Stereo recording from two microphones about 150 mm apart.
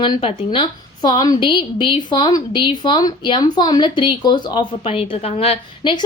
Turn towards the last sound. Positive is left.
turn(degrees=35)  # may be behind; listen again after turning